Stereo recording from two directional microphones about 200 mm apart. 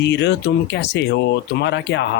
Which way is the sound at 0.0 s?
60° left (ahead or behind).